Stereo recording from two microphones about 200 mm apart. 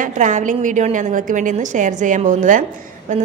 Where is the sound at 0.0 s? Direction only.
40° right (ahead or behind).